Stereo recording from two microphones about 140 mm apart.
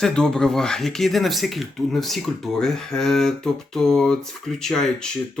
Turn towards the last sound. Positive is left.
turn(degrees=5)  # may be behind; listen again after turning